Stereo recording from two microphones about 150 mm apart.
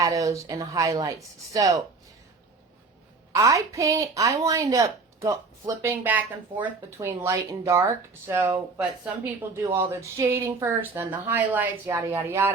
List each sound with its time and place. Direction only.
0.0 s a woman's voice: 20° right (ahead or behind)
3.3 s a woman's voice: 20° right (ahead or behind)